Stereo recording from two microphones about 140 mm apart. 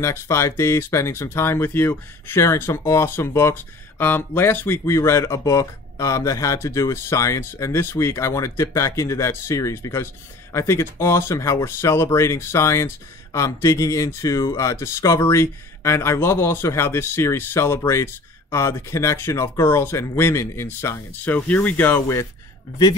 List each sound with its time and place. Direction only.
0.0 s speech: 20° left (ahead or behind)